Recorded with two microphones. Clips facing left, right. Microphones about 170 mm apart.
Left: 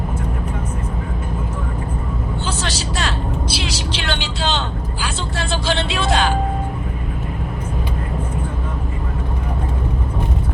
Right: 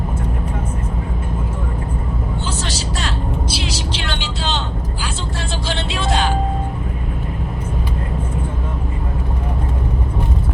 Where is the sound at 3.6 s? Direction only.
75° left (ahead or behind).